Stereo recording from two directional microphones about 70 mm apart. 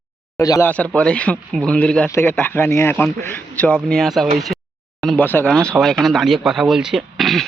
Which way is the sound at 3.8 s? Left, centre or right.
Centre.